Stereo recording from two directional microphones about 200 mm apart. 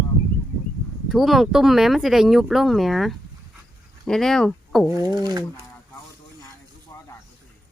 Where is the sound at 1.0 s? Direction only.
Centre (ahead or behind).